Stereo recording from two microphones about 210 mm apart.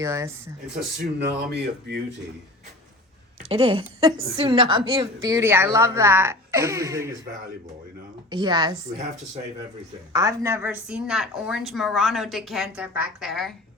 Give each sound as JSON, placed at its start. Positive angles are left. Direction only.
{"t": 0.0, "sound": "a woman's voice", "side_deg": -15}
{"t": 1.5, "sound": "speech", "side_deg": -55}
{"t": 3.5, "sound": "a woman's voice", "side_deg": -25}
{"t": 8.3, "sound": "a woman's voice", "side_deg": -20}
{"t": 10.1, "sound": "a woman's voice", "side_deg": -15}